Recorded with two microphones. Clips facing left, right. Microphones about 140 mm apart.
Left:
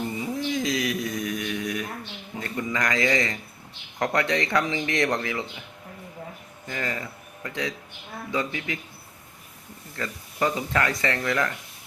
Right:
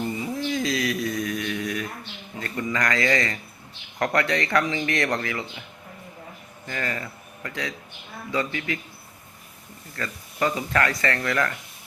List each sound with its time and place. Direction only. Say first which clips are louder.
0.5 s mantra: right 1 dB; 20° left (ahead or behind)
2.4 s speech: right 1 dB; 15° left (ahead or behind)
6.7 s speech: right 1 dB; 15° left (ahead or behind)
9.9 s speech: even; 15° left (ahead or behind)